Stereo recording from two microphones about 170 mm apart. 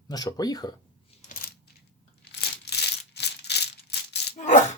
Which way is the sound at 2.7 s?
75° left (ahead or behind).